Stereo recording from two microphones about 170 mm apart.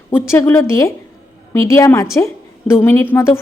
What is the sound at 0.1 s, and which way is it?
A woman's voice, 15° left (ahead or behind).